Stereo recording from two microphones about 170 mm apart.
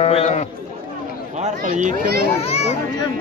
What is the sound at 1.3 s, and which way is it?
Speech, 45° right (ahead or behind).